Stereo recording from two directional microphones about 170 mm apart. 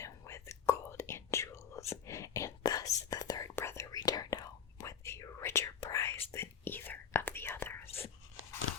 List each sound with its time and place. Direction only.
0.0 s whispering: 15° left (ahead or behind)
7.9 s whispering: 35° left (ahead or behind)